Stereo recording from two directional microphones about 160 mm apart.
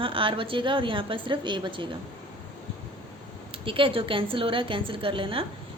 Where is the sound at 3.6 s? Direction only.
35° right (ahead or behind).